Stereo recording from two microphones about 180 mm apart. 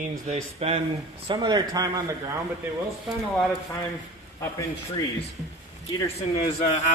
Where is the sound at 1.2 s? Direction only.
25° right (ahead or behind).